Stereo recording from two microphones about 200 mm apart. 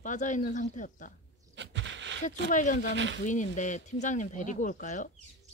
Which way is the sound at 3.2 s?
40° left (ahead or behind).